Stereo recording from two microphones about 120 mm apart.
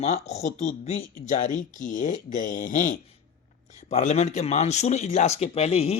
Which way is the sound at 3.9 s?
75° left (ahead or behind).